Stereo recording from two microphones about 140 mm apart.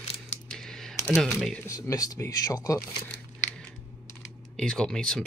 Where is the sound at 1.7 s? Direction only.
25° left (ahead or behind).